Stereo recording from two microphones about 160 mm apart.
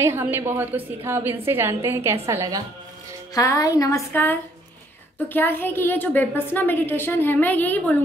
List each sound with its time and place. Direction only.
0.0 s a woman's voice: 15° right (ahead or behind)
3.3 s speech: 20° left (ahead or behind)
4.1 s a woman's voice: 10° left (ahead or behind)